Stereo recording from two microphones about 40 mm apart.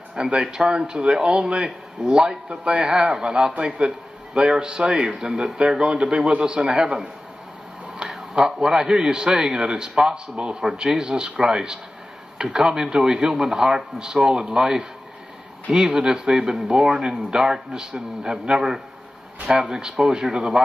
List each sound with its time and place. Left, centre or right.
0.3 s a man's voice: centre